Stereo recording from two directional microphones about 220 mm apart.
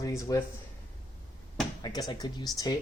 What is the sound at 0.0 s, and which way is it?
Speech, 15° left (ahead or behind).